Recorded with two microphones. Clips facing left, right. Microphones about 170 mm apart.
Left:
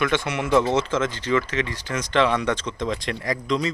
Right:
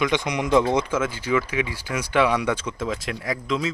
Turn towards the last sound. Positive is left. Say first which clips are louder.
# left 1 dB
turn(degrees=0)  # may be behind; listen again after turning